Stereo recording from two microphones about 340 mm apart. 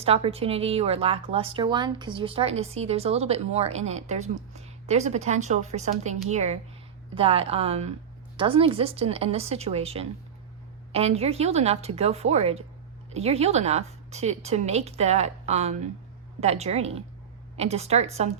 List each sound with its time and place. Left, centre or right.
0.0 s a woman's voice: centre